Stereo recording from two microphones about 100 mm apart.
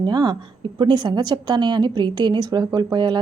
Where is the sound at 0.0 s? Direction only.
45° right (ahead or behind).